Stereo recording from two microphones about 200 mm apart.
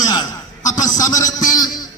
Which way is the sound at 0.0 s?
20° left (ahead or behind).